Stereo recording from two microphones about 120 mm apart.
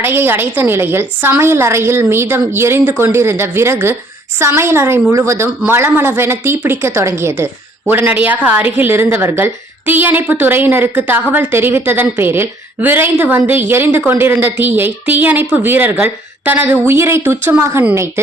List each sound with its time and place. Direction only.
0.0 s a woman's voice: 20° right (ahead or behind)